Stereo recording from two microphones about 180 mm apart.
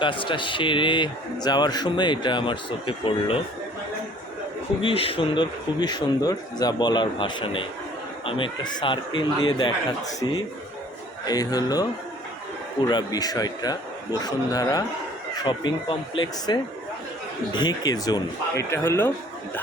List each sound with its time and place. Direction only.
0.0 s a man's voice: 25° left (ahead or behind)
4.8 s a man's voice: 30° left (ahead or behind)
11.3 s a man's voice: 20° left (ahead or behind)
12.9 s a man's voice: 20° left (ahead or behind)